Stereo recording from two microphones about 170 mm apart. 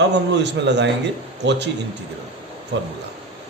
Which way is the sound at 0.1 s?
90° right.